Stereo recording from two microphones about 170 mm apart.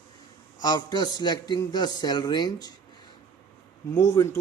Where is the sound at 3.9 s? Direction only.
20° left (ahead or behind).